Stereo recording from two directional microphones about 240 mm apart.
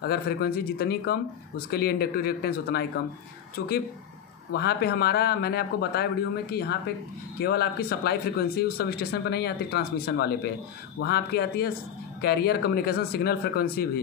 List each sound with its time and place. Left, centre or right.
0.0 s speech: left